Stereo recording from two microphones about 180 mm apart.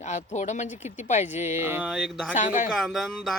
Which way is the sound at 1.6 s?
10° right (ahead or behind).